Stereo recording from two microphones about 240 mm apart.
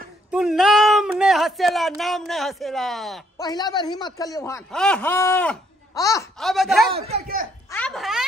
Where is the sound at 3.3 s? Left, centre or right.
Centre.